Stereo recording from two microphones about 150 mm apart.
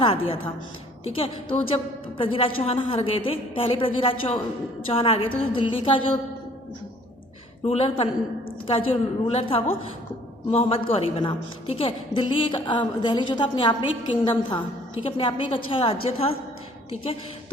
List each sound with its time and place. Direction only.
0.0 s a woman's voice: 35° left (ahead or behind)
7.6 s a woman's voice: 40° left (ahead or behind)